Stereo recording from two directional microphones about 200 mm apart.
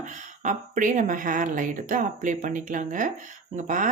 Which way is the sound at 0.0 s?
40° right (ahead or behind).